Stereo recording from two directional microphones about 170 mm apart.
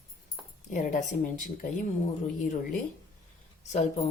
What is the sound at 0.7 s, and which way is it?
Speech, 50° left (ahead or behind).